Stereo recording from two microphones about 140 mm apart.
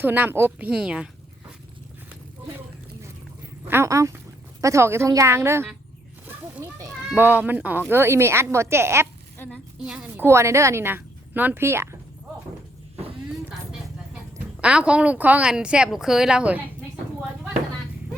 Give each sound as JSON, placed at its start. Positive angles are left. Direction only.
{"t": 0.0, "sound": "speech", "side_deg": -15}
{"t": 3.7, "sound": "a woman's voice", "side_deg": -20}
{"t": 9.4, "sound": "a woman's voice", "side_deg": 15}
{"t": 9.8, "sound": "speech", "side_deg": -5}
{"t": 10.2, "sound": "a woman's voice", "side_deg": -20}
{"t": 14.6, "sound": "speech", "side_deg": -10}